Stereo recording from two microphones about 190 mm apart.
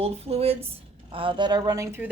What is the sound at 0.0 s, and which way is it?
Speech, 30° right (ahead or behind).